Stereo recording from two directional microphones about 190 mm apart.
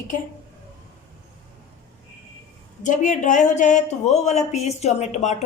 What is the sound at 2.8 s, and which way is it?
Speech, 40° left (ahead or behind).